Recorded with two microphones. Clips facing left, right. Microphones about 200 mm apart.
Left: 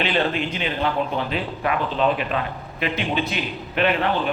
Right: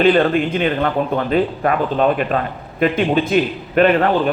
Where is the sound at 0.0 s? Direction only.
50° right (ahead or behind).